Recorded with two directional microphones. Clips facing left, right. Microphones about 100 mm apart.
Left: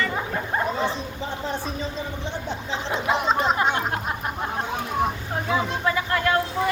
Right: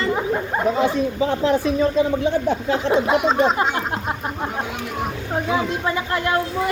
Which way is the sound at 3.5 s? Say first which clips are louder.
Right 1 dB; 25° right (ahead or behind).